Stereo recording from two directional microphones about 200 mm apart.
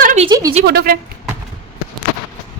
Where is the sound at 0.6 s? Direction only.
50° right (ahead or behind).